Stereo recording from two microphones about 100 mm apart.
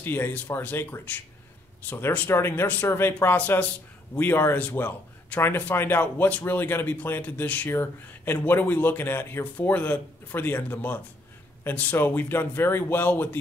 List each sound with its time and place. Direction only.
0.0 s a man's voice: 20° left (ahead or behind)